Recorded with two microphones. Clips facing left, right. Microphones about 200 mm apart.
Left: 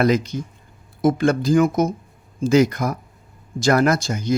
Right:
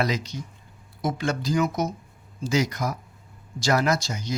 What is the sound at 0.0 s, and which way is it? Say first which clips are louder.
Speech: left 8 dB; 50° left (ahead or behind).